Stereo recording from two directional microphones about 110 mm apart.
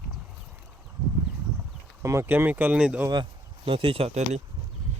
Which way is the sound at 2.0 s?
25° right (ahead or behind).